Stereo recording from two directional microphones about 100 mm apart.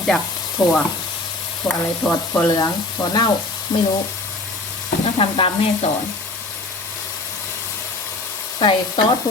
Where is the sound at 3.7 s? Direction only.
40° left (ahead or behind).